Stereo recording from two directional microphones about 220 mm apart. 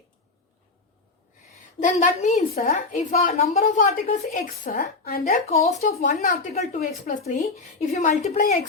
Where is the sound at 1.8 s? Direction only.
35° left (ahead or behind).